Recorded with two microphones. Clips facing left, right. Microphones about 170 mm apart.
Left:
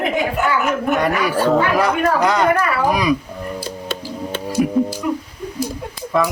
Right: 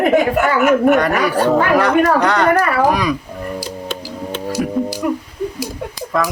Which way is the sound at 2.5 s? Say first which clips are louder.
Right 3 dB; 40° right (ahead or behind).